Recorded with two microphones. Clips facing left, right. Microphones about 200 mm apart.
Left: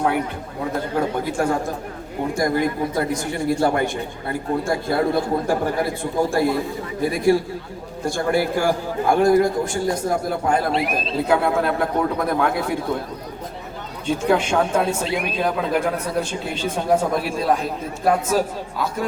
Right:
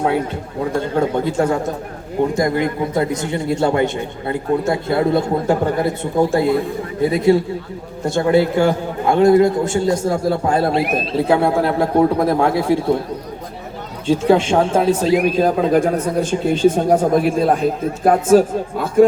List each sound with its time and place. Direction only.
0.8 s speech: 25° right (ahead or behind)
14.1 s speech: 30° right (ahead or behind); by 19.0 s 50° right (ahead or behind)